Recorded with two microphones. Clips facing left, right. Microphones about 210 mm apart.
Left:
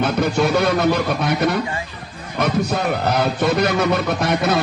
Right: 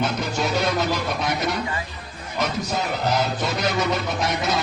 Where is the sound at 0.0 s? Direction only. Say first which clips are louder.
Left 6 dB; 60° left (ahead or behind).